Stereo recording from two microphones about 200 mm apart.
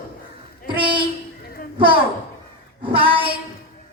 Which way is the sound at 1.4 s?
45° left (ahead or behind).